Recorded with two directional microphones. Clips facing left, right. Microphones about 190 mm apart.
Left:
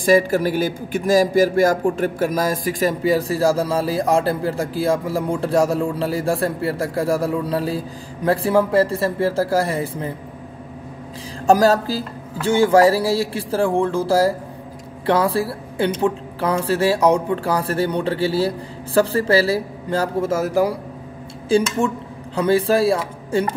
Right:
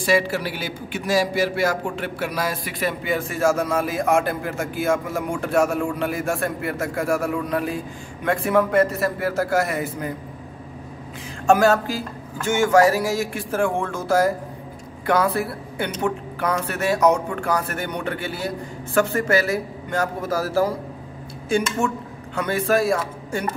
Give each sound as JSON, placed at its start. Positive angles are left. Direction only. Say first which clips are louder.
{"t": 0.0, "sound": "a man's voice", "louder": "left 5 dB", "side_deg": 50}
{"t": 11.4, "sound": "a man's voice", "louder": "left 2 dB", "side_deg": 35}
{"t": 21.5, "sound": "speech", "louder": "left 4 dB", "side_deg": 30}